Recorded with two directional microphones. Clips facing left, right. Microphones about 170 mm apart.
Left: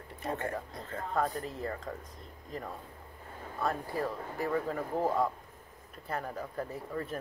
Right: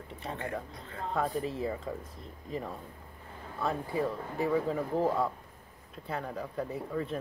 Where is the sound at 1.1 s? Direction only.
5° right (ahead or behind).